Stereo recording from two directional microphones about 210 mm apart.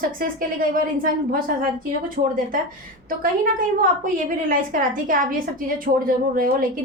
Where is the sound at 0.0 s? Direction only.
40° right (ahead or behind).